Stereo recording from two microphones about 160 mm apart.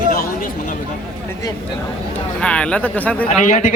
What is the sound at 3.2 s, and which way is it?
Speech, 50° left (ahead or behind).